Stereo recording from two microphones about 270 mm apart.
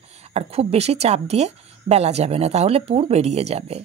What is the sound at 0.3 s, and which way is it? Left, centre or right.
Speech, right.